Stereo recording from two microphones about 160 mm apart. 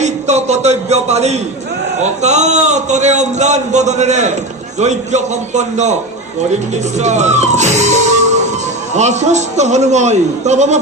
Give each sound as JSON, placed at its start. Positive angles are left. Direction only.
{"t": 0.0, "sound": "a man's voice", "side_deg": -45}